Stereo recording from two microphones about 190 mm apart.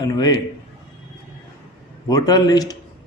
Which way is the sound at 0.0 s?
20° left (ahead or behind).